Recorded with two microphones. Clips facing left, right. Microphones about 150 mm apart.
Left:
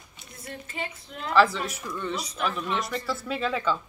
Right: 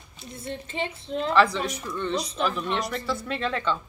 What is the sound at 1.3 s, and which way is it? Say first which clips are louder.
Speech: left 1 dB; centre (ahead or behind).